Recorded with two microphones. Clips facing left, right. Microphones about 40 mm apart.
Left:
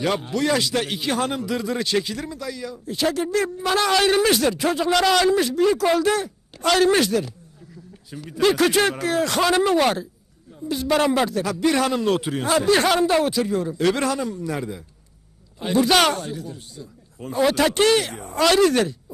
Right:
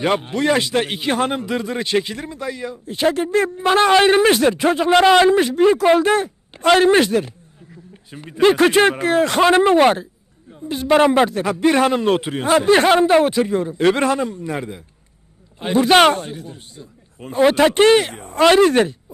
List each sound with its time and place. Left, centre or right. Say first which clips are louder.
0.0 s a man's voice: right 4 dB; right